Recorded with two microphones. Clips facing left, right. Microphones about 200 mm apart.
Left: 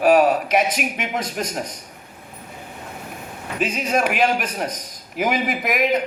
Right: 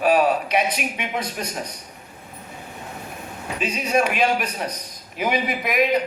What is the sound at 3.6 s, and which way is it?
A man's voice, 50° left (ahead or behind).